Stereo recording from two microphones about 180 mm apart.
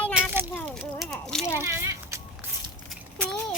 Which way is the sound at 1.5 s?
15° right (ahead or behind).